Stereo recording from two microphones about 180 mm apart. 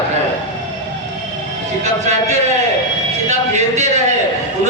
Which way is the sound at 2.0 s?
40° right (ahead or behind).